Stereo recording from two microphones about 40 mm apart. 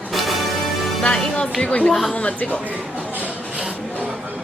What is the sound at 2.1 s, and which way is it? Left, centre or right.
Speech, left.